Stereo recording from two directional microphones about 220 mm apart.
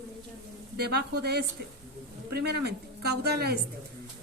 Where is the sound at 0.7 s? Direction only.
45° right (ahead or behind).